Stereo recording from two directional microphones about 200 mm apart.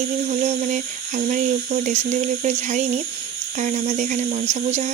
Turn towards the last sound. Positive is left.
turn(degrees=-35)  # may be behind; listen again after turning